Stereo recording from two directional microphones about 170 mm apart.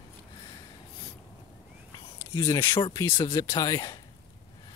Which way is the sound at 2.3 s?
15° left (ahead or behind).